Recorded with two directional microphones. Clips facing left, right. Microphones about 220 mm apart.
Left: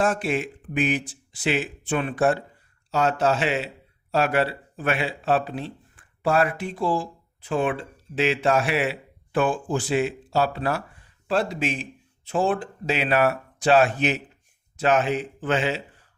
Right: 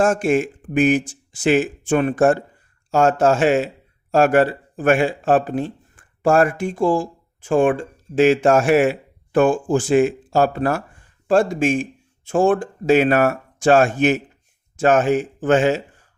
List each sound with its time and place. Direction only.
0.0 s speech: 45° right (ahead or behind)